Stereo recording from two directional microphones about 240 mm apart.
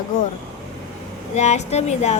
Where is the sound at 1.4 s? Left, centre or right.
Left.